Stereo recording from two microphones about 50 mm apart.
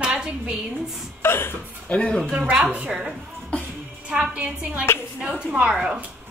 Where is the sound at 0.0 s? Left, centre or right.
Centre.